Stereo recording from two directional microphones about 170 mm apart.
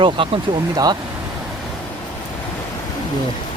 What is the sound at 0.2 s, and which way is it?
Speech, 30° right (ahead or behind).